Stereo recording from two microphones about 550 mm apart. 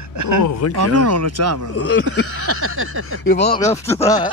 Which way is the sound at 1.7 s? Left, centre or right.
Centre.